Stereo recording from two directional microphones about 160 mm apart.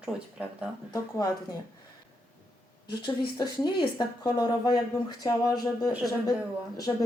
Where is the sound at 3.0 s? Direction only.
25° left (ahead or behind).